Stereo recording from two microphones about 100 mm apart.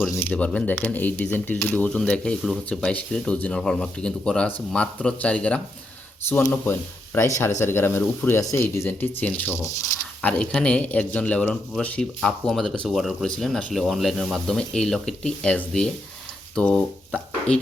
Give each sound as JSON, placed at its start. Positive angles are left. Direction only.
{"t": 0.3, "sound": "speech", "side_deg": 10}
{"t": 12.2, "sound": "speech", "side_deg": 5}